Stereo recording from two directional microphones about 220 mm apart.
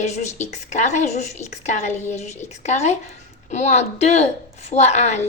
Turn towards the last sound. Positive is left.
turn(degrees=30)  # may be behind; listen again after turning